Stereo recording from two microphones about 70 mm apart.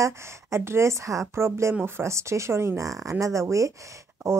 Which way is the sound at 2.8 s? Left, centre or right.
Right.